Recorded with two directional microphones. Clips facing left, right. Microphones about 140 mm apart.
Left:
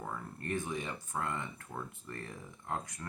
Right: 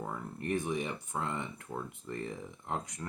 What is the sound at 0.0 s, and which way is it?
Speech, 15° right (ahead or behind).